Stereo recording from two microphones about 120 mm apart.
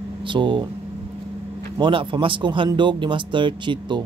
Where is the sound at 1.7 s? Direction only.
45° right (ahead or behind).